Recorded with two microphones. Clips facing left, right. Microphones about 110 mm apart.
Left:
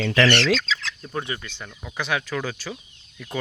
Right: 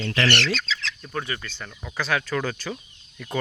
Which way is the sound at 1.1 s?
20° left (ahead or behind).